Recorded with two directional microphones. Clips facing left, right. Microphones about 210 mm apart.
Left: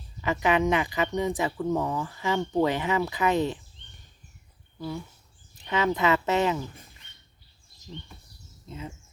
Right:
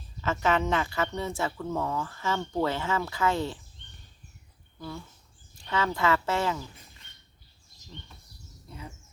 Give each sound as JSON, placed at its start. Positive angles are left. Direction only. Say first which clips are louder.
{"t": 0.2, "sound": "speech", "louder": "left 2 dB", "side_deg": 15}
{"t": 4.8, "sound": "speech", "louder": "left 5 dB", "side_deg": 15}
{"t": 8.6, "sound": "bird", "louder": "left 5 dB", "side_deg": 20}